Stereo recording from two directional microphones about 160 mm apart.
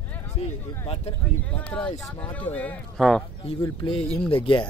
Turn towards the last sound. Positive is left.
turn(degrees=30)  # may be behind; listen again after turning